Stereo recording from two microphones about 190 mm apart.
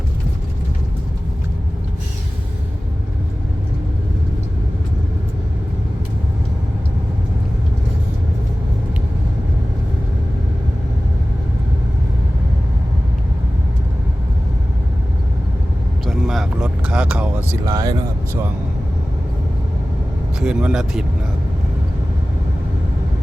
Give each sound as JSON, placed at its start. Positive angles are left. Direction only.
{"t": 16.0, "sound": "a sound", "side_deg": 0}
{"t": 17.7, "sound": "vehicle", "side_deg": -20}
{"t": 20.4, "sound": "speech", "side_deg": -5}